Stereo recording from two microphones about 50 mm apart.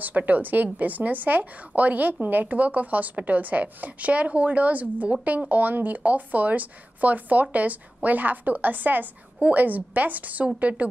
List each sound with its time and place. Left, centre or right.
0.0 s speech: right